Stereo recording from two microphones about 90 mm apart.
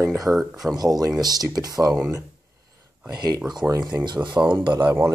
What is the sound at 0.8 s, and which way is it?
Speech, 45° right (ahead or behind).